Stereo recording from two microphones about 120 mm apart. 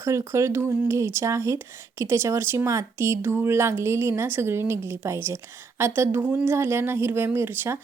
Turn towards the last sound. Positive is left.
turn(degrees=-20)  # may be behind; listen again after turning